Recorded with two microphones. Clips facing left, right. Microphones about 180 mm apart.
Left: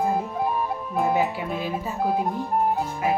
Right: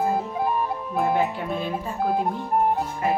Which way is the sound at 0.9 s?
Centre (ahead or behind).